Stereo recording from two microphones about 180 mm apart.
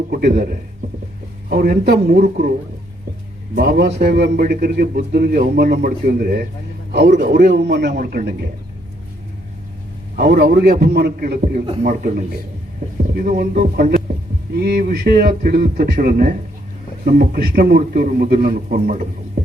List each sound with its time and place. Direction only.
0.1 s a man's voice: 60° right (ahead or behind)
1.5 s a man's voice: 55° right (ahead or behind)
3.5 s a man's voice: 55° right (ahead or behind)
6.9 s a man's voice: 65° right (ahead or behind)
10.2 s a man's voice: 65° right (ahead or behind)
14.6 s a man's voice: 60° right (ahead or behind)